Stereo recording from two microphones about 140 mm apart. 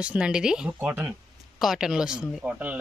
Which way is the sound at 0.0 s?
10° right (ahead or behind).